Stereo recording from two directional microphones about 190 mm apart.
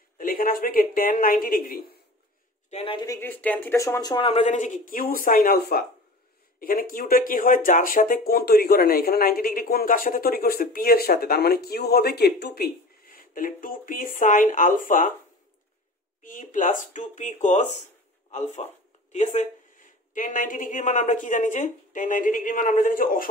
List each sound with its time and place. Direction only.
0.2 s speech: 50° left (ahead or behind)
2.7 s speech: 30° left (ahead or behind)
16.2 s speech: 45° left (ahead or behind)